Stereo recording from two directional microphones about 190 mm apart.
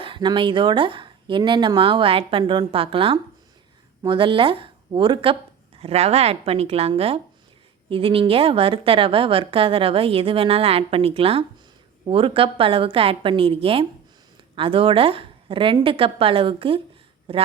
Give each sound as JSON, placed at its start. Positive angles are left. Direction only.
{"t": 0.0, "sound": "a woman's voice", "side_deg": -25}